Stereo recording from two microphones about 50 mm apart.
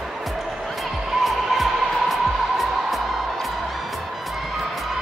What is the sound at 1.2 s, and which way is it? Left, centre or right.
Music, centre.